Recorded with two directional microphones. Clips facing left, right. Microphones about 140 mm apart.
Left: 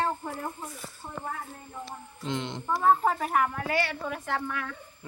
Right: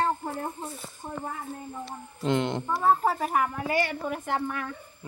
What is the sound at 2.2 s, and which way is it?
Speech, 55° right (ahead or behind).